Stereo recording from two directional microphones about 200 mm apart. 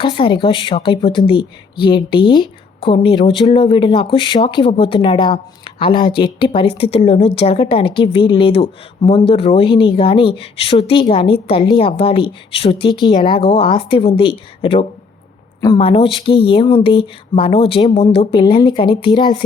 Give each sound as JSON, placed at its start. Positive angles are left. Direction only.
{"t": 0.0, "sound": "a woman's voice", "side_deg": 25}